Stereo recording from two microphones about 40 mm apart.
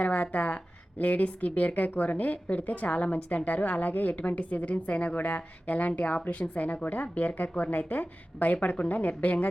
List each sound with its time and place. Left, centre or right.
0.0 s a woman's voice: left